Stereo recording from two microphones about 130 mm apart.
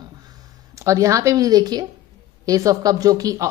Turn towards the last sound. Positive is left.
turn(degrees=-25)  # may be behind; listen again after turning